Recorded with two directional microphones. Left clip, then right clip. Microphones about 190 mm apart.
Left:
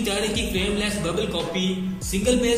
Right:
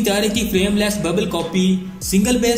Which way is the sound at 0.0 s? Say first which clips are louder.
Right 6 dB; 45° right (ahead or behind).